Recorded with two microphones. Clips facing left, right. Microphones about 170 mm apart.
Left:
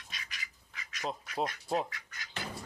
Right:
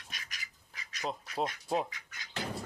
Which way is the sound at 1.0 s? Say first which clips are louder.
Even; centre (ahead or behind).